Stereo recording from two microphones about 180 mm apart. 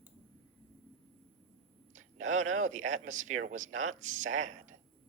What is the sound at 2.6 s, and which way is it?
Speech, 45° right (ahead or behind).